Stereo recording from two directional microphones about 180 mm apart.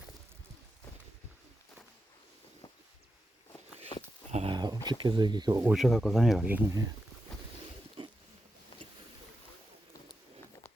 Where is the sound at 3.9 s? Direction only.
25° left (ahead or behind).